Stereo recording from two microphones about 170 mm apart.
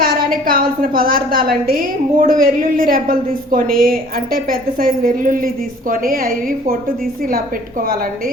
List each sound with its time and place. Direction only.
0.0 s a woman's voice: 55° right (ahead or behind)